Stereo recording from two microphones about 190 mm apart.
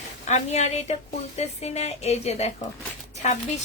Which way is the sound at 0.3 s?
35° left (ahead or behind).